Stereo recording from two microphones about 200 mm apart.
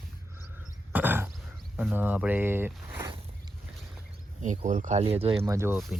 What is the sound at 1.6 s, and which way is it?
Speech, 5° right (ahead or behind).